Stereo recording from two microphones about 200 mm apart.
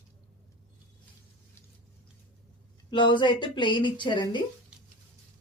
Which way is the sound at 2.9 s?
20° left (ahead or behind).